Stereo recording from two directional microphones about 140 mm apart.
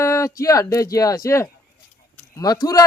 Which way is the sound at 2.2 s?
20° left (ahead or behind).